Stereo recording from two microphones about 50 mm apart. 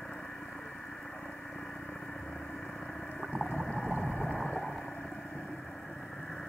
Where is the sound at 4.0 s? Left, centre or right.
Left.